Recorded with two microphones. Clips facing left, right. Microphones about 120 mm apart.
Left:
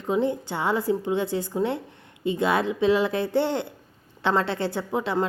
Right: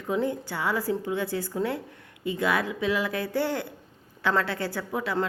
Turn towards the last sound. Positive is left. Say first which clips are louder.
# left 3 dB
turn(degrees=25)  # may be behind; listen again after turning